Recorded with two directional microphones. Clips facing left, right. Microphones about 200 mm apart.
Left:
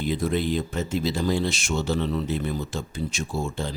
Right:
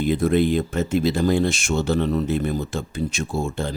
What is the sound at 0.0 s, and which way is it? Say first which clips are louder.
Speech: right 6 dB; 55° right (ahead or behind).